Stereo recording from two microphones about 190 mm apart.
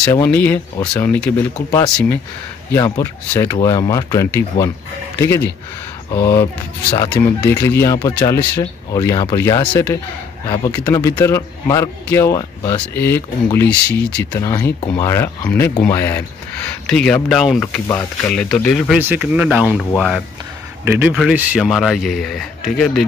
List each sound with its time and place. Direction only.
0.0 s speech: 15° left (ahead or behind)
2.7 s speech: 15° left (ahead or behind)
6.1 s speech: 15° left (ahead or behind)
10.9 s speech: 15° left (ahead or behind)
17.8 s speech: 15° left (ahead or behind)
18.3 s speech: 5° left (ahead or behind)
18.9 s speech: 10° right (ahead or behind)